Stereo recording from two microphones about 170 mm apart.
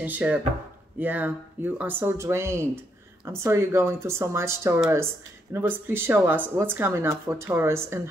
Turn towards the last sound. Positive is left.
turn(degrees=-15)  # may be behind; listen again after turning